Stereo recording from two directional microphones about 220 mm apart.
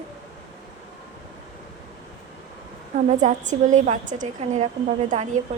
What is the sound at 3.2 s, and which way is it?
A woman's voice, 35° right (ahead or behind).